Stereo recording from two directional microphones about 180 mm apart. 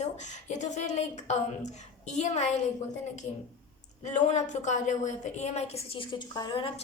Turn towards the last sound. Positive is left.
turn(degrees=25)  # may be behind; listen again after turning